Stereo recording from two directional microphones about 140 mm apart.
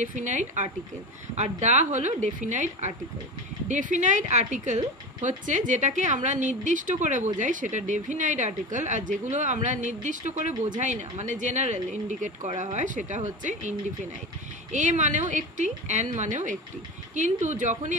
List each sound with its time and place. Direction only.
0.0 s speech: 65° right (ahead or behind)